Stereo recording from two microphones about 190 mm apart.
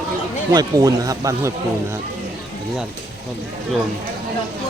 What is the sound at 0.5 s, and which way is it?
Speech, 20° right (ahead or behind).